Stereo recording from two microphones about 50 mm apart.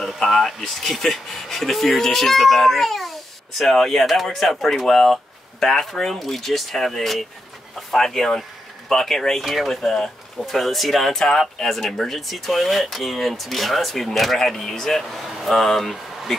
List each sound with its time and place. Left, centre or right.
0.2 s speech: centre
9.4 s speech: centre
9.7 s speech: centre